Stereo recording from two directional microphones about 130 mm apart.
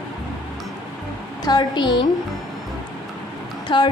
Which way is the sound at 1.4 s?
35° left (ahead or behind).